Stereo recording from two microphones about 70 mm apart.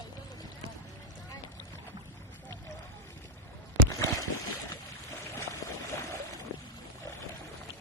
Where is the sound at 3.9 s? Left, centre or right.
Left.